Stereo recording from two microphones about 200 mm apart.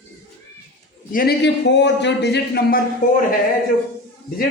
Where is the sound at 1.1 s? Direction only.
55° left (ahead or behind).